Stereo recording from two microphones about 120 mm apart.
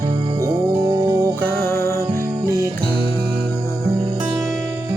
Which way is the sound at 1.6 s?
25° left (ahead or behind).